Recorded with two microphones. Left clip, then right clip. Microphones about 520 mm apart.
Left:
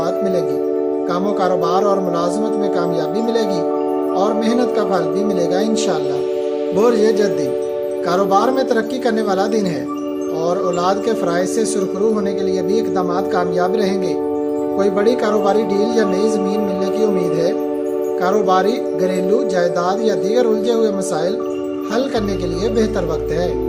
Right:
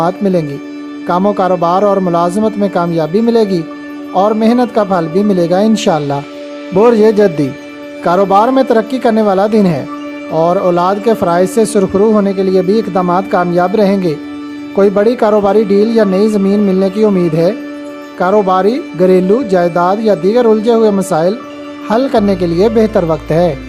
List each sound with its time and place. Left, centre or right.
1.1 s speech: centre
18.2 s speech: centre